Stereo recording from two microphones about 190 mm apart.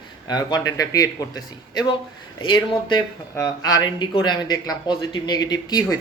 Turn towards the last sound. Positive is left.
turn(degrees=20)  # may be behind; listen again after turning